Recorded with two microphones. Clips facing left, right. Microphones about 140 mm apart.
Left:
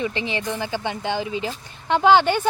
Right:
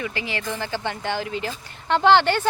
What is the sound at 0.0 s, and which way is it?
Speech, 25° left (ahead or behind).